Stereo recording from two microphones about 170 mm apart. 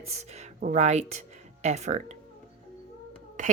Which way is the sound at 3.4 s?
50° right (ahead or behind).